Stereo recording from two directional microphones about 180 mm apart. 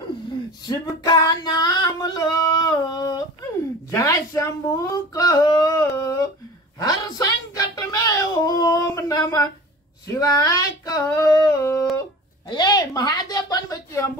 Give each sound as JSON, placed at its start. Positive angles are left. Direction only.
{"t": 0.7, "sound": "female singing", "side_deg": 20}
{"t": 3.9, "sound": "a sound", "side_deg": 15}
{"t": 10.0, "sound": "female singing", "side_deg": 20}
{"t": 12.4, "sound": "a woman's voice", "side_deg": 25}